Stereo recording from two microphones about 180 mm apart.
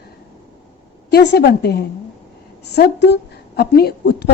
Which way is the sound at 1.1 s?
65° left (ahead or behind).